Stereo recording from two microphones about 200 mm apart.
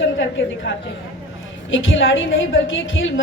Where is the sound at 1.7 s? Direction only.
70° left (ahead or behind).